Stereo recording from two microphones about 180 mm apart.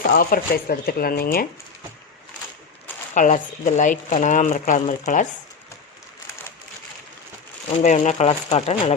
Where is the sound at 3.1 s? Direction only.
45° left (ahead or behind).